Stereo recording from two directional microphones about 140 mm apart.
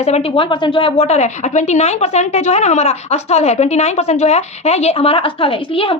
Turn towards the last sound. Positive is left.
turn(degrees=40)  # may be behind; listen again after turning